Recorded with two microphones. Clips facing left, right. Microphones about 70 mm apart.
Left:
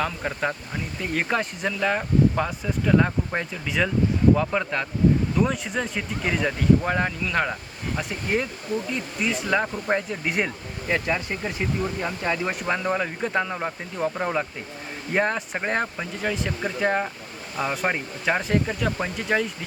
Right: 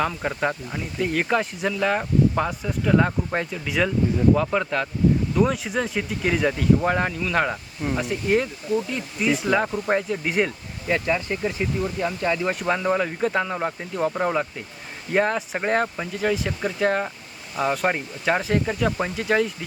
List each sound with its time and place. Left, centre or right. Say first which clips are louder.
0.0 s speech: right 2 dB; centre
8.7 s speech: right 5 dB; left
9.2 s speech: right 3 dB; centre